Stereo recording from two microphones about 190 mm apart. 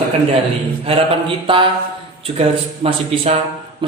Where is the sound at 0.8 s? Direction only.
30° right (ahead or behind).